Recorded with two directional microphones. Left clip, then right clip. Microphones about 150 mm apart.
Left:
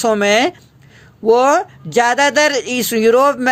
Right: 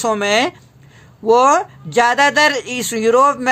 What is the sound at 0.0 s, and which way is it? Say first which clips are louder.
Speech: left 2 dB; 30° left (ahead or behind).